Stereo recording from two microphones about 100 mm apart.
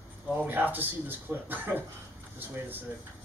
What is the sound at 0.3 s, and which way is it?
Speech, 20° right (ahead or behind).